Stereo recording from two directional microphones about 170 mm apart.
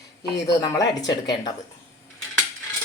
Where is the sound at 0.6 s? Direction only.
25° left (ahead or behind).